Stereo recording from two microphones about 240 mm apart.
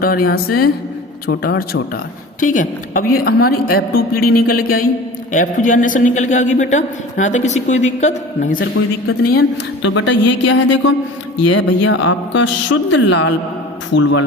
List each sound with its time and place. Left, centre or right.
0.0 s a man's voice: left